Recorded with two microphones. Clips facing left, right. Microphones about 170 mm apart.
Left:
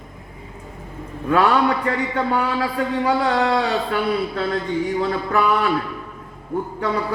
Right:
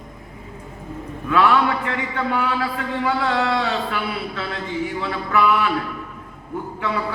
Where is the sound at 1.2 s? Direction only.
40° left (ahead or behind).